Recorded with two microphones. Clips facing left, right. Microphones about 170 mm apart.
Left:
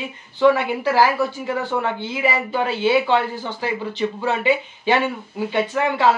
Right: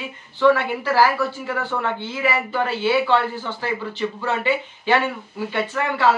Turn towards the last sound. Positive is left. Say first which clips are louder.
# left 2 dB
turn(degrees=15)  # may be behind; listen again after turning